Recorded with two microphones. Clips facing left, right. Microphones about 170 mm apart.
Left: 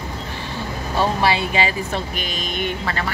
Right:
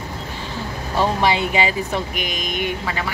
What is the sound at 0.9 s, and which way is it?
Speech, 20° right (ahead or behind).